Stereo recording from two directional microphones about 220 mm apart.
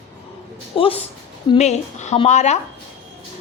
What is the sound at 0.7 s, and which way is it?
A woman's voice, 25° left (ahead or behind).